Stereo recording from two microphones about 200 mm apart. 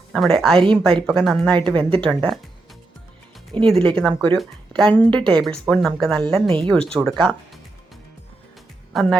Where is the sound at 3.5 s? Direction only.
25° right (ahead or behind).